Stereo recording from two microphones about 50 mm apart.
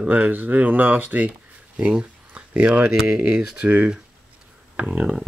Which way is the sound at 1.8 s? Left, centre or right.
Right.